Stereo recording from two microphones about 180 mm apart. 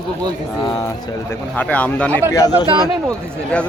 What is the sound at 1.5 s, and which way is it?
Speech, 10° left (ahead or behind).